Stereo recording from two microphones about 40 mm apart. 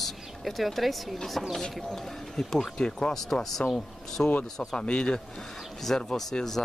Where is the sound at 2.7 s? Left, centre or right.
Left.